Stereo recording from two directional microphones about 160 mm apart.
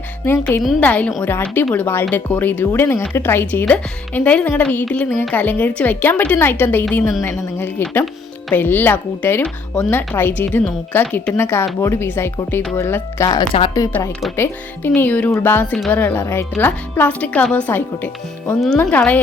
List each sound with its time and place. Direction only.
0.3 s speech: 15° left (ahead or behind)